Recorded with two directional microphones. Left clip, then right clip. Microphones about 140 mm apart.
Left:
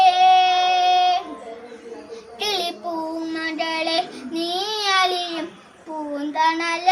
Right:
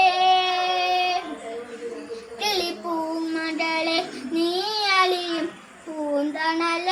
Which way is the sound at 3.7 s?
15° left (ahead or behind).